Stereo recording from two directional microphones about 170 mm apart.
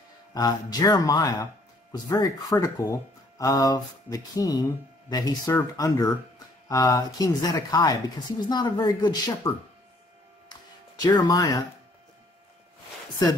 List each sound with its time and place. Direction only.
0.3 s speech: 20° left (ahead or behind)
10.5 s music: 25° left (ahead or behind)